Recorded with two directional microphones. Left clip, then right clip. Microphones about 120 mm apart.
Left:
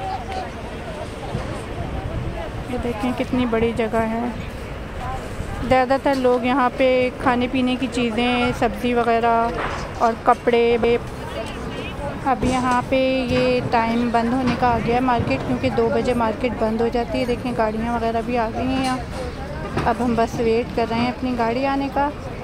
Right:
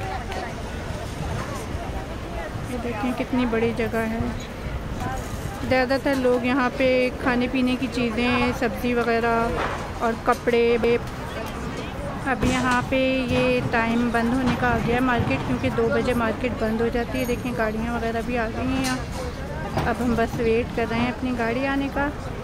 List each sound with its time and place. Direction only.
3.2 s speech: 5° left (ahead or behind)
5.7 s speech: 5° left (ahead or behind)
12.3 s speech: 15° left (ahead or behind)